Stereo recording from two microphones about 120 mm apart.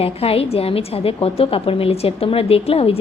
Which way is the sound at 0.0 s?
55° left (ahead or behind).